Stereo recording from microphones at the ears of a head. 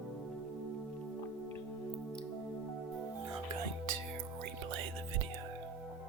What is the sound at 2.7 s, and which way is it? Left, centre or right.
Music, right.